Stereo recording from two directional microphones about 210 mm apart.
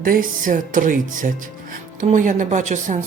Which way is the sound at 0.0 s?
40° right (ahead or behind).